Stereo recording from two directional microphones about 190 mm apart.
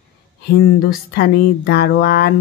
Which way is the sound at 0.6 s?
55° left (ahead or behind).